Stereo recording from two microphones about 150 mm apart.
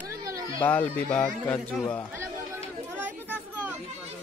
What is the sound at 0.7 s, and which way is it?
Speech, 10° left (ahead or behind).